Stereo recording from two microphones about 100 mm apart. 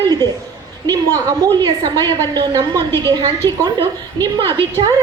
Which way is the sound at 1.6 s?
40° right (ahead or behind).